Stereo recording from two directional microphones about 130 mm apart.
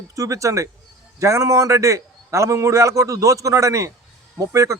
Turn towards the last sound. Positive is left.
turn(degrees=-25)  # may be behind; listen again after turning